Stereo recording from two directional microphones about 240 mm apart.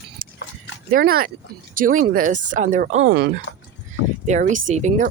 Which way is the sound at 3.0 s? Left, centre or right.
Right.